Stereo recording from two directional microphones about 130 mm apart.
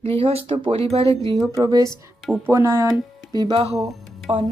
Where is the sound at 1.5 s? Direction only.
25° right (ahead or behind).